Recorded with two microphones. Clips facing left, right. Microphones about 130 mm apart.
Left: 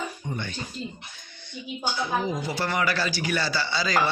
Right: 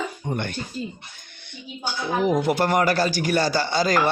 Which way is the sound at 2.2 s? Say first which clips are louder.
Right 8 dB; 60° right (ahead or behind).